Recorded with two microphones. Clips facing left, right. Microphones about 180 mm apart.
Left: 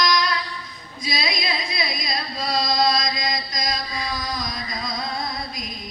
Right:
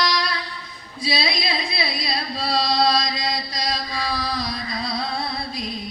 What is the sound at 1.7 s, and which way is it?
Chant, 30° right (ahead or behind).